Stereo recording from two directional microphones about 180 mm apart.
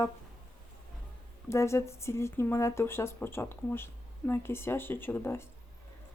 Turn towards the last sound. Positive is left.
turn(degrees=15)  # may be behind; listen again after turning